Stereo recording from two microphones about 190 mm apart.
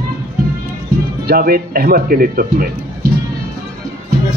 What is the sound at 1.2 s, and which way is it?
A man's voice, 50° right (ahead or behind).